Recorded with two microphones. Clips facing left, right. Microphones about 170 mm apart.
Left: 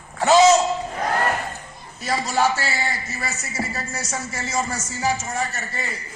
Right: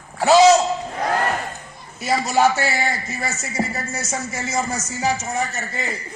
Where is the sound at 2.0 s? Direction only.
10° right (ahead or behind).